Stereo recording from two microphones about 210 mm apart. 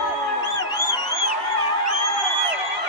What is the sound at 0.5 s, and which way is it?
Music, 50° right (ahead or behind).